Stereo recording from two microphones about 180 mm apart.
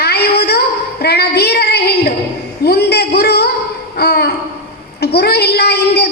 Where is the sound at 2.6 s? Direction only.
65° left (ahead or behind).